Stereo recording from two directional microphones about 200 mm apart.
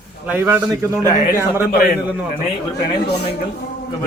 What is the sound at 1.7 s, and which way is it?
Speech, 45° left (ahead or behind).